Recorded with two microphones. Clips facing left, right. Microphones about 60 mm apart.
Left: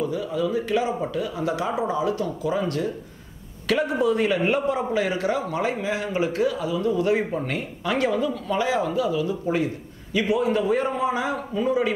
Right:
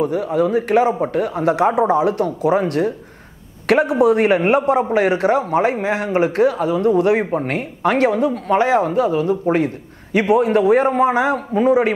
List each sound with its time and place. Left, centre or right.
0.0 s a man's voice: right
4.9 s speech: right